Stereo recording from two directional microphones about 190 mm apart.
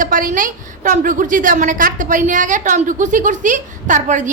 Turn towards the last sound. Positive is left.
turn(degrees=-40)  # may be behind; listen again after turning